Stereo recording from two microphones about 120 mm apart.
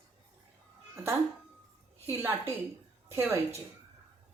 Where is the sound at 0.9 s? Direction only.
20° right (ahead or behind).